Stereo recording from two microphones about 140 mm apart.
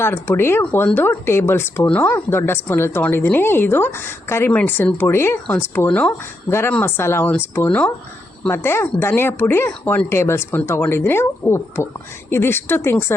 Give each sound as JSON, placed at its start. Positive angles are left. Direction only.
{"t": 0.0, "sound": "speech", "side_deg": 15}